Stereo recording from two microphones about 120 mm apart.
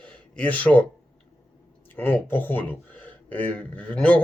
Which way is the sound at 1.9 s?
15° left (ahead or behind).